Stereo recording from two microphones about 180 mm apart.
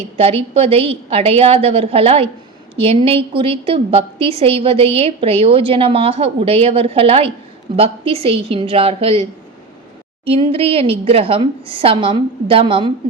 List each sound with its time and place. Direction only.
0.2 s a woman's voice: 30° right (ahead or behind)
10.2 s a woman's voice: 30° right (ahead or behind)